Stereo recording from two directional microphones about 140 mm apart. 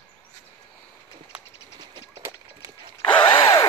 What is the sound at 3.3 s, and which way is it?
Zipper, 30° left (ahead or behind).